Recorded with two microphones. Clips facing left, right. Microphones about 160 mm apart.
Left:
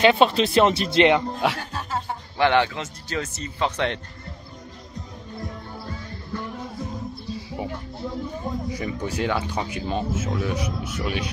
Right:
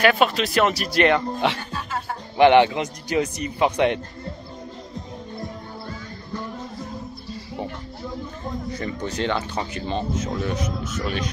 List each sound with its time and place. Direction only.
0.0 s speech: 25° left (ahead or behind)
1.4 s speech: 5° left (ahead or behind)
2.3 s a man's voice: 20° right (ahead or behind)
7.3 s music: 5° left (ahead or behind)
8.6 s speech: 10° left (ahead or behind)